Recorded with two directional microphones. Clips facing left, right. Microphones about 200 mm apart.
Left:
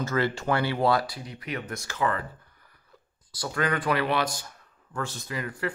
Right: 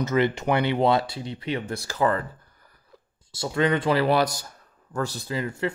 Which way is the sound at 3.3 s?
25° right (ahead or behind).